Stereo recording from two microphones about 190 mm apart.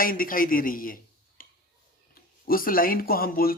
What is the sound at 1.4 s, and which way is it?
Tick-tock, 45° left (ahead or behind).